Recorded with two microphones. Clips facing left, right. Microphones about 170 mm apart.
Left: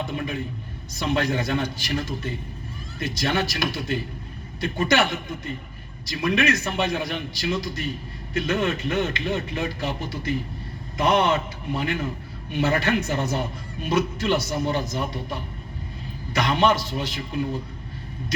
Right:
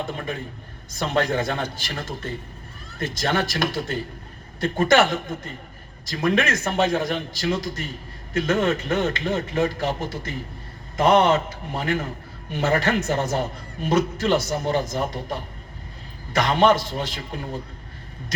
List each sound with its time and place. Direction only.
0.0 s a man's voice: 50° right (ahead or behind)